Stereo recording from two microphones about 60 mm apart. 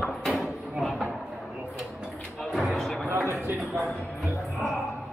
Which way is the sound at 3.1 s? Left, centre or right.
Right.